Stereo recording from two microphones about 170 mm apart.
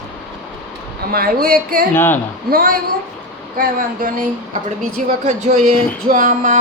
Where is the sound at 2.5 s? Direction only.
60° right (ahead or behind).